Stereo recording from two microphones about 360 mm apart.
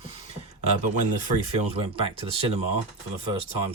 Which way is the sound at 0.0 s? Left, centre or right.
Centre.